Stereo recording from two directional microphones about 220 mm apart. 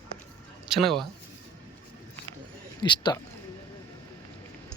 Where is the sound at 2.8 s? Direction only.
20° left (ahead or behind).